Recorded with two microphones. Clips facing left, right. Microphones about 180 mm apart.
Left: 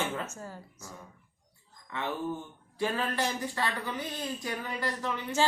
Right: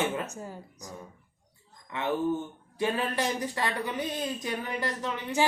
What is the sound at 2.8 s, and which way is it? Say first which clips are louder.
A woman's voice: right 2 dB; 20° right (ahead or behind).